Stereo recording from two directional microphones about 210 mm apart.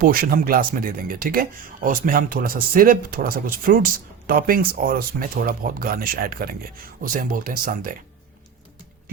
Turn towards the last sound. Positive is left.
turn(degrees=-40)  # may be behind; listen again after turning